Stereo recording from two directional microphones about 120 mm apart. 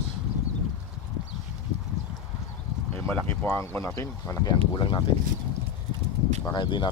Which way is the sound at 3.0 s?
15° left (ahead or behind).